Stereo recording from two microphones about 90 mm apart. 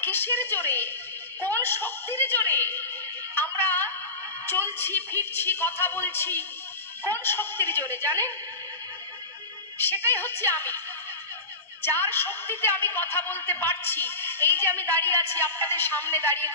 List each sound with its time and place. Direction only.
0.0 s a woman's voice: 25° left (ahead or behind)
9.8 s a woman's voice: 25° left (ahead or behind)
11.9 s a woman's voice: 25° left (ahead or behind)